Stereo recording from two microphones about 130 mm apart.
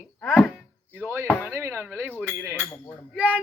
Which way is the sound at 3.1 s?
10° right (ahead or behind).